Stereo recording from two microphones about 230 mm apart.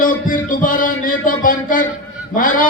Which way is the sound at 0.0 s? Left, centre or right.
Left.